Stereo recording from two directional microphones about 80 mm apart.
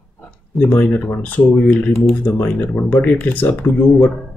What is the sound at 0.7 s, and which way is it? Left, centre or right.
Speech, left.